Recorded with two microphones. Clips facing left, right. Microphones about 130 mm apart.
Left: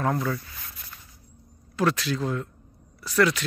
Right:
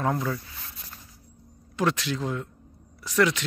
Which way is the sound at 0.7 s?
25° right (ahead or behind).